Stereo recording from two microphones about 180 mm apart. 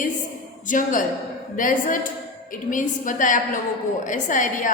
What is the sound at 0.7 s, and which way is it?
A woman's voice, 45° left (ahead or behind).